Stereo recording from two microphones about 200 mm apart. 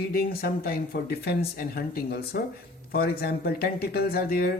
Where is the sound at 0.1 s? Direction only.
50° left (ahead or behind).